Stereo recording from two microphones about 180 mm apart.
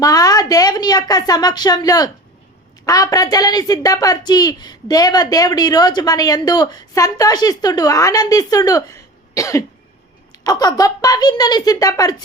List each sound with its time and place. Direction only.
0.0 s a woman's voice: 20° left (ahead or behind)